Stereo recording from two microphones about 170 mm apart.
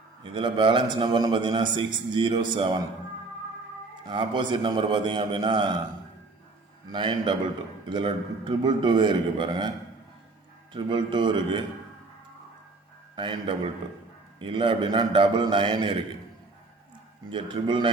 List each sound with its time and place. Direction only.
0.2 s a man's voice: 30° right (ahead or behind)
4.0 s a man's voice: 30° right (ahead or behind)
6.9 s a man's voice: 30° right (ahead or behind)
10.8 s a man's voice: 25° right (ahead or behind)
13.1 s a man's voice: 30° right (ahead or behind)
17.2 s a man's voice: 30° right (ahead or behind)